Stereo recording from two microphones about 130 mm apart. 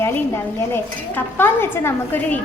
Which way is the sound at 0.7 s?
15° left (ahead or behind).